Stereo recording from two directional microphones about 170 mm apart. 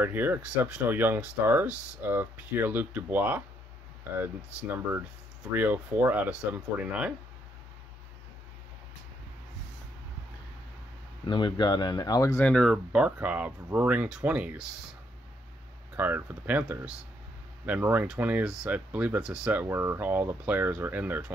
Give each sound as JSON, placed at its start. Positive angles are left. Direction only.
{"t": 0.0, "sound": "speech", "side_deg": -10}
{"t": 11.2, "sound": "speech", "side_deg": 25}
{"t": 12.4, "sound": "speech", "side_deg": 5}
{"t": 16.0, "sound": "speech", "side_deg": -10}